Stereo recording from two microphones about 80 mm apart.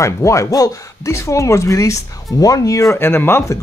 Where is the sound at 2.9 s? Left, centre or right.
Left.